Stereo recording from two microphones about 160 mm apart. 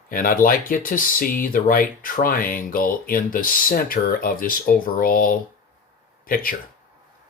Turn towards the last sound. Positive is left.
turn(degrees=60)  # may be behind; listen again after turning